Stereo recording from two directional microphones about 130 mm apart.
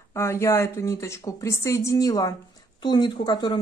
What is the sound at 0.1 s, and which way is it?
Speech, 20° left (ahead or behind).